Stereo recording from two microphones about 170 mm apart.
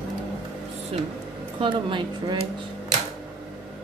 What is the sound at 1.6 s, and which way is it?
Speech, 30° right (ahead or behind).